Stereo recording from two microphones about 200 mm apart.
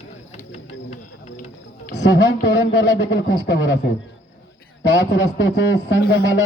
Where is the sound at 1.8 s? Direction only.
60° left (ahead or behind).